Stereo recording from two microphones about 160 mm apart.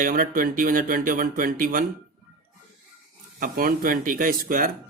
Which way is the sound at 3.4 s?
65° right (ahead or behind).